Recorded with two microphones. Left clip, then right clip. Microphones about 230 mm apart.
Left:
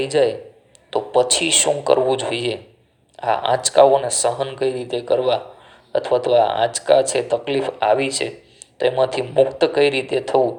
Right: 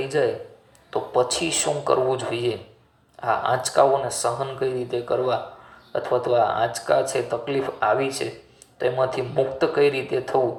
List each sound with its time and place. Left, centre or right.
0.0 s speech: left